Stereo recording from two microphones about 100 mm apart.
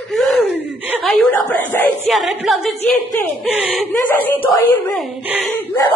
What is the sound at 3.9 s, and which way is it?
Speech, 20° left (ahead or behind).